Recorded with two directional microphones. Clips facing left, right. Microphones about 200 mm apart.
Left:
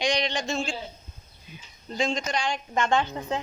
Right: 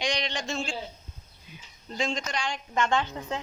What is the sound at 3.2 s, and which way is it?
Speech, 30° left (ahead or behind).